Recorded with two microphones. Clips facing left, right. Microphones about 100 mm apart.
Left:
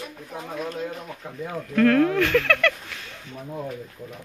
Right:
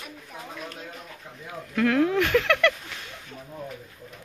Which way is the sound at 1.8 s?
15° right (ahead or behind).